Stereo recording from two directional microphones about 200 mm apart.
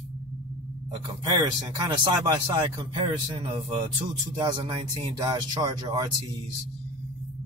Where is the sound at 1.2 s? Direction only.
20° right (ahead or behind).